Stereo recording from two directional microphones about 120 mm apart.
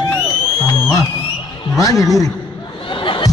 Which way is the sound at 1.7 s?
30° left (ahead or behind).